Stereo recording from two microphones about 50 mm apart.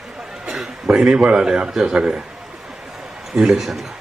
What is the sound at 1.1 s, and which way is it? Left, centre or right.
A man's voice, centre.